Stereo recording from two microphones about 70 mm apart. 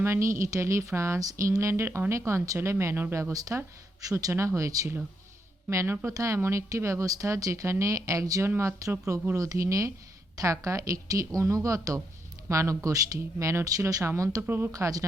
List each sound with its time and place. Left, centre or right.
0.0 s speech: right
3.3 s speech: right
5.7 s speech: right
8.4 s speech: right
9.3 s speech: right
14.4 s speech: right
14.7 s speech: right